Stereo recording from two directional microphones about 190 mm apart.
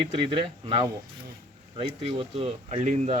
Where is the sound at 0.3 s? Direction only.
30° right (ahead or behind).